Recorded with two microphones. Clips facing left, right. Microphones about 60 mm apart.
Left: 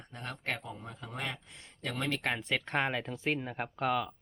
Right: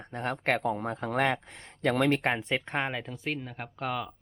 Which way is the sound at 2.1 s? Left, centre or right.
Right.